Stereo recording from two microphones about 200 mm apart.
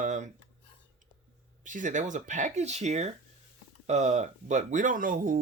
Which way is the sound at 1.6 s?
40° right (ahead or behind).